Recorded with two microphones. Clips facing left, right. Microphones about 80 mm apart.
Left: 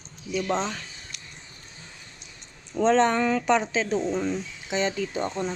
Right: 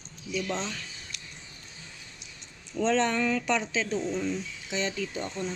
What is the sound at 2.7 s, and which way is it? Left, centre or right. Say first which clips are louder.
Speech: left 5 dB; left.